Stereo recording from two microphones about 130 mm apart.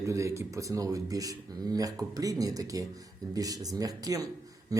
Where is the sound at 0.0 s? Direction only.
25° right (ahead or behind).